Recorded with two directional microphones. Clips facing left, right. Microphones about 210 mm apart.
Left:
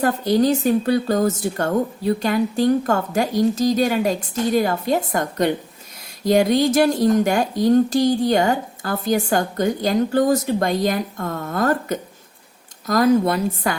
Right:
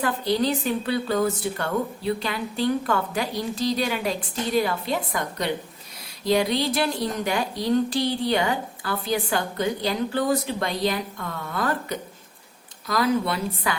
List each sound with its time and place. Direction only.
0.0 s speech: 45° left (ahead or behind)